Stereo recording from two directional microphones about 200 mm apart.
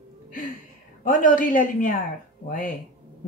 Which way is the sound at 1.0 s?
40° left (ahead or behind).